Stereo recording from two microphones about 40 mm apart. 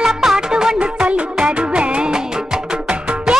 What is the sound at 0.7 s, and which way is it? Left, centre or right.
Music, right.